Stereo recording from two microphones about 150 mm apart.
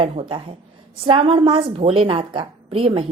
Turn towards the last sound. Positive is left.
turn(degrees=-35)  # may be behind; listen again after turning